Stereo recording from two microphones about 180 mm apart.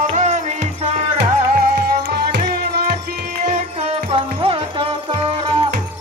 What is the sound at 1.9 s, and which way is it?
Music, 60° right (ahead or behind).